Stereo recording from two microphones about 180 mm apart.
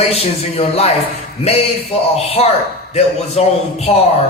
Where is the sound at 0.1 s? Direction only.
35° left (ahead or behind).